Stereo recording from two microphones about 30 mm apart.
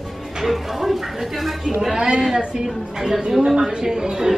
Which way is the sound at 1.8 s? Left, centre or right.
Right.